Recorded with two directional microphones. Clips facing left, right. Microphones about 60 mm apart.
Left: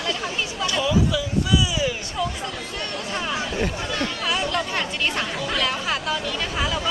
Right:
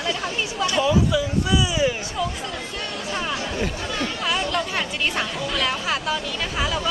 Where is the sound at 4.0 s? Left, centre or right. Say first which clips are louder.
Right 1 dB; centre.